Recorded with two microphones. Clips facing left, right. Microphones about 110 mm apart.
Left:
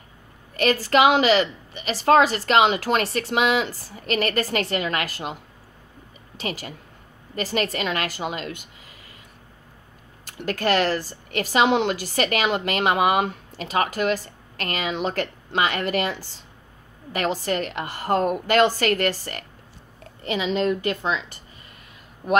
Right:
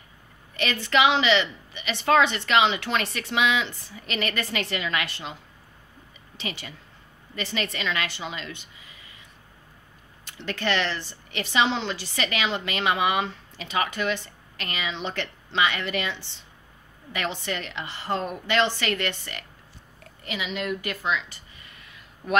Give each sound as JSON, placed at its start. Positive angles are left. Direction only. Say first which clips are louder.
{"t": 0.8, "sound": "a woman's voice", "louder": "left 3 dB", "side_deg": 45}
{"t": 10.3, "sound": "a woman's voice", "louder": "left 5 dB", "side_deg": 45}
{"t": 20.0, "sound": "a woman's voice", "louder": "left 7 dB", "side_deg": 30}